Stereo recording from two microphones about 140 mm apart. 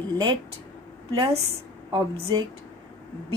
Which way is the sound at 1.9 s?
30° right (ahead or behind).